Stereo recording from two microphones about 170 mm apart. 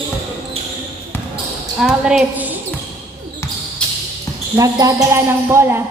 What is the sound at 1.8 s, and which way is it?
Speech, 5° right (ahead or behind).